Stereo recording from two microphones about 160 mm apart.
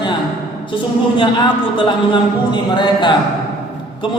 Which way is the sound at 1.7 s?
30° left (ahead or behind).